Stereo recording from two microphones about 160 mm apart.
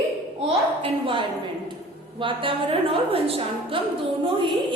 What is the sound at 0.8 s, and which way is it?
A woman's voice, 35° right (ahead or behind).